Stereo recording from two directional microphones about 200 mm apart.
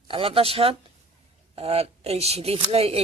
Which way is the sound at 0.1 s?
25° right (ahead or behind).